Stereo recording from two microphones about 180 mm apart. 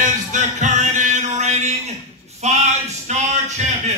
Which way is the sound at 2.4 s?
40° right (ahead or behind).